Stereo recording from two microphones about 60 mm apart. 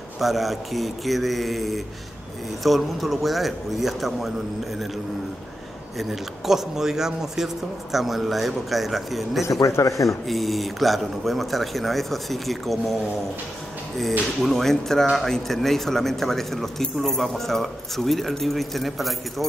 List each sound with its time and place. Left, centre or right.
0.2 s speech: centre
5.9 s speech: centre
9.8 s speech: left
10.0 s speech: centre
14.4 s speech: centre